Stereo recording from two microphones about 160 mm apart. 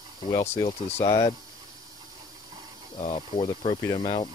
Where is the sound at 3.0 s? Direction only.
35° left (ahead or behind).